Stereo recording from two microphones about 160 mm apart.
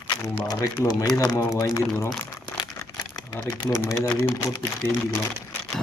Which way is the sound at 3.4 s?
20° left (ahead or behind).